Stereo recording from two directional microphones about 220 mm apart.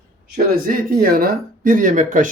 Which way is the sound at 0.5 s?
40° right (ahead or behind).